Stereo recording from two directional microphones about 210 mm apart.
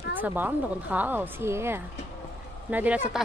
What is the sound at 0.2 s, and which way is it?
A woman's voice, 10° right (ahead or behind).